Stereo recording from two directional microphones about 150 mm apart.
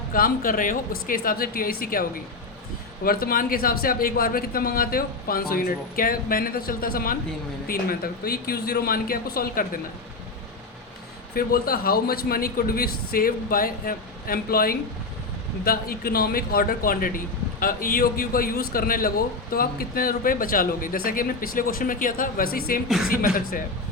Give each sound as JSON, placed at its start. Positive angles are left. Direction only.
{"t": 0.1, "sound": "a man's voice", "side_deg": 70}
{"t": 11.3, "sound": "a man's voice", "side_deg": 80}